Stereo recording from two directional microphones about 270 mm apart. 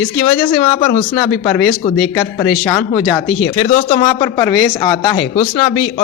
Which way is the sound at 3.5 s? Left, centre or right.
Left.